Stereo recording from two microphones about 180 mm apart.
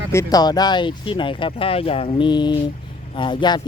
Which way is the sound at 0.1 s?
20° left (ahead or behind).